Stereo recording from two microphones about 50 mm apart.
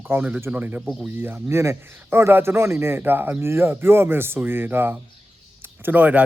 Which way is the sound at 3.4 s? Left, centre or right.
Right.